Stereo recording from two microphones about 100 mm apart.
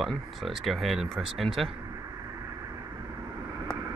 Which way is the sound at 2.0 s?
35° right (ahead or behind).